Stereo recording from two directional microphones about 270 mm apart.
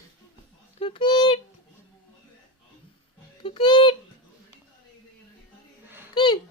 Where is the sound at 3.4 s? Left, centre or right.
Centre.